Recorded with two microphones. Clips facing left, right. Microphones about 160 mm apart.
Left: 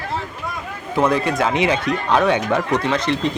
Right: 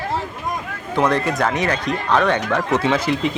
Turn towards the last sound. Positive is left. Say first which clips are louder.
# right 1 dB
turn(degrees=-5)  # may be behind; listen again after turning